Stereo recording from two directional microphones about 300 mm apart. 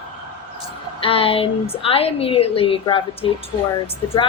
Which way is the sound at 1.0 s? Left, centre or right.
Centre.